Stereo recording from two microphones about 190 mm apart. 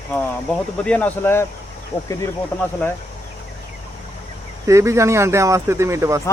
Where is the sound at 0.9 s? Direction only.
10° left (ahead or behind).